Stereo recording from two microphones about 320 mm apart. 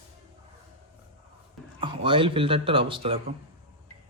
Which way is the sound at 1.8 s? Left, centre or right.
Centre.